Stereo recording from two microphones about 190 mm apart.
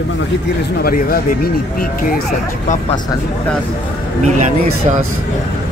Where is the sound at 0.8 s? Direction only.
50° left (ahead or behind).